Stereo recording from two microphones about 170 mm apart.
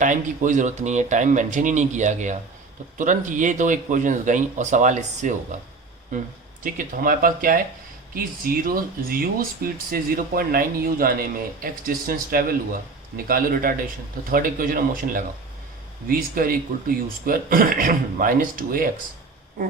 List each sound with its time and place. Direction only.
0.0 s speech: 50° right (ahead or behind)
6.7 s speech: 55° right (ahead or behind)